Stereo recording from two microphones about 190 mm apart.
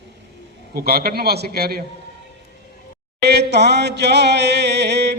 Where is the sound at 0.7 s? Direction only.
55° right (ahead or behind).